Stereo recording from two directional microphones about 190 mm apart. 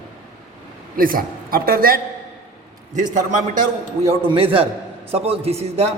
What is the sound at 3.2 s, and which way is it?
Speech, 40° right (ahead or behind).